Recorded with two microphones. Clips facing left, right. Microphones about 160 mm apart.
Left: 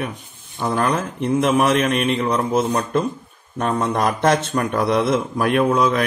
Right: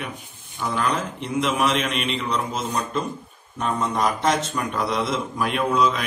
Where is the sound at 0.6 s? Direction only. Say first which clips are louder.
Left 4 dB; 55° left (ahead or behind).